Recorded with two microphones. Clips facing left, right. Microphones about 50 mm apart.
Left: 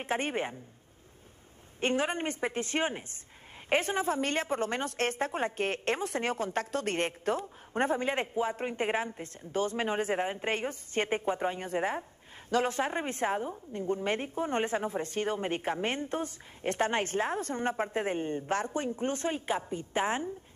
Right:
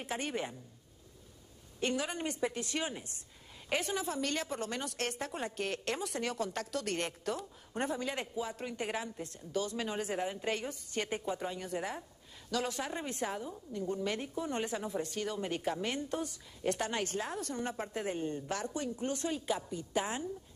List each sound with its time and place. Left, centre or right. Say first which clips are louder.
0.0 s a woman's voice: left 5 dB; left
1.8 s a woman's voice: left 5 dB; left